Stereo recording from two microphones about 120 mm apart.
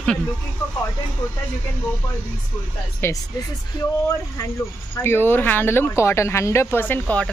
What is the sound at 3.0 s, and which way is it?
Speech, 20° left (ahead or behind).